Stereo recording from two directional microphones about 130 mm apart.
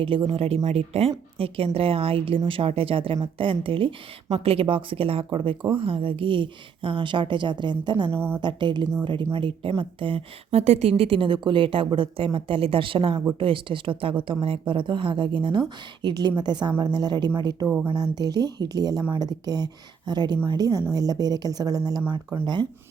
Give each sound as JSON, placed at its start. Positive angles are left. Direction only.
{"t": 0.0, "sound": "a woman's voice", "side_deg": -45}
{"t": 8.1, "sound": "a woman's voice", "side_deg": -15}
{"t": 8.4, "sound": "a woman's voice", "side_deg": -35}